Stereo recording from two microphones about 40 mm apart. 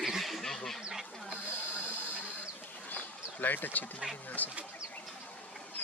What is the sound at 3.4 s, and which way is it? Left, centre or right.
Speech, left.